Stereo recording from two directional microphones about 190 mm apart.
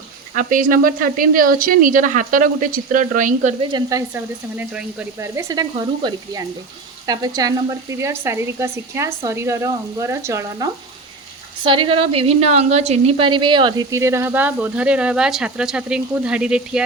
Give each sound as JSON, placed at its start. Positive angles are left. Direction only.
{"t": 0.3, "sound": "a woman's voice", "side_deg": -45}
{"t": 3.6, "sound": "speech", "side_deg": -20}
{"t": 5.7, "sound": "sizzle", "side_deg": -25}
{"t": 7.1, "sound": "speech", "side_deg": -20}
{"t": 11.6, "sound": "speech", "side_deg": -25}